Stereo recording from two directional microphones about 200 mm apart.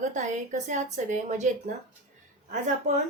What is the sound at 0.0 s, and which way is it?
A woman's voice, 35° right (ahead or behind).